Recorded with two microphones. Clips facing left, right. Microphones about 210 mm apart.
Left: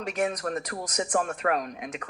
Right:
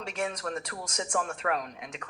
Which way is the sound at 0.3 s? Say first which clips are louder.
Left 4 dB; 45° left (ahead or behind).